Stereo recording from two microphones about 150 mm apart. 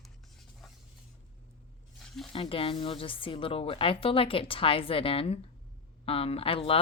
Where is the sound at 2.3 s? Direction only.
40° left (ahead or behind).